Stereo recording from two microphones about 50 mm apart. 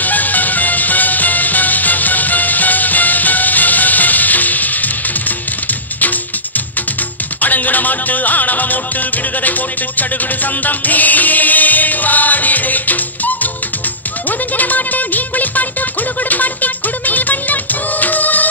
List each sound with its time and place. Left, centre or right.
0.0 s music: left
7.4 s music: left
14.6 s music: left
18.0 s music of bollywood: left